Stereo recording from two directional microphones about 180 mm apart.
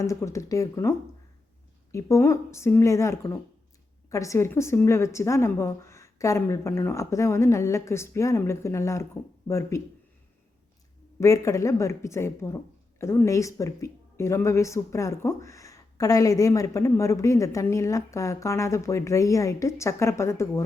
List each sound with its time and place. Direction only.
0.0 s speech: 15° left (ahead or behind)
11.2 s speech: 15° left (ahead or behind)